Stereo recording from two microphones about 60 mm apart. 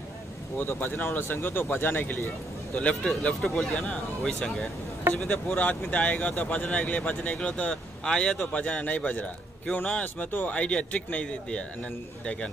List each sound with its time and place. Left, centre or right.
0.6 s speech: left
2.7 s speech: centre
3.7 s speech: centre
5.2 s speech: centre